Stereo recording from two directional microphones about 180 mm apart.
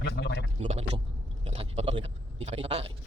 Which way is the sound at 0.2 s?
70° left (ahead or behind).